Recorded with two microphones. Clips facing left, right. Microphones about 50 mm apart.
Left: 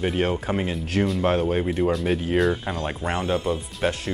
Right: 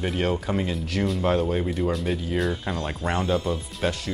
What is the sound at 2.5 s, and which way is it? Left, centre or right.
Speech, left.